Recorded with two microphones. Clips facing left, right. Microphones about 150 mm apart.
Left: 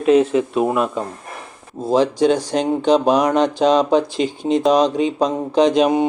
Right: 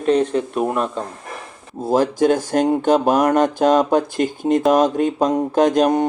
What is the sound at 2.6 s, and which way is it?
Speech, 5° right (ahead or behind).